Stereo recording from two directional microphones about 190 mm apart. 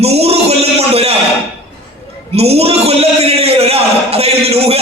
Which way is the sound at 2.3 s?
30° right (ahead or behind).